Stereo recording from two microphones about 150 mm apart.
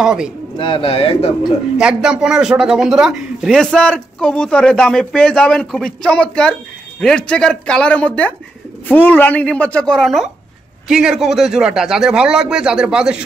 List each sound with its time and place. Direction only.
0.0 s speech: 5° right (ahead or behind)
0.6 s speech: 35° left (ahead or behind)
1.4 s speech: 5° right (ahead or behind)